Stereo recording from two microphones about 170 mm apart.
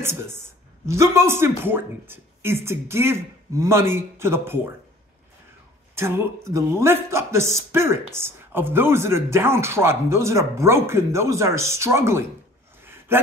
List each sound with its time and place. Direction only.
0.0 s speech: 15° right (ahead or behind)
5.9 s speech: 15° right (ahead or behind)
12.8 s a sound: 15° right (ahead or behind)